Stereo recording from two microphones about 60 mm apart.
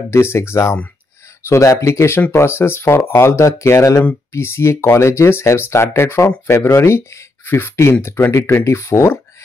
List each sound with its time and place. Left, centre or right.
0.1 s speech: left
3.2 s speech: left
7.4 s speech: left